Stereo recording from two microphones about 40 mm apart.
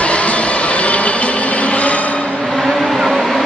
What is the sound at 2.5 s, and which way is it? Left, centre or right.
Vehicle, centre.